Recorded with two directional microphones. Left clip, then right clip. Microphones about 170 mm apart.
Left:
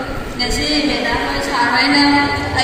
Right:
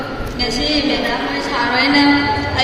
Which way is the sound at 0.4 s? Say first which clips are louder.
Even; 35° right (ahead or behind).